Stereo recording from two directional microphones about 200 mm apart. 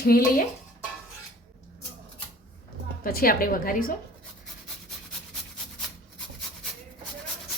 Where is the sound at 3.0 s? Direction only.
50° left (ahead or behind).